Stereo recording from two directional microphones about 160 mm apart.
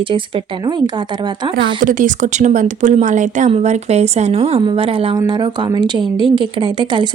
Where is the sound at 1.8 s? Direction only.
55° right (ahead or behind).